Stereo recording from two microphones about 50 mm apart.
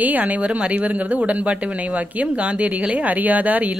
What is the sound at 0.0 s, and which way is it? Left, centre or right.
Speech, right.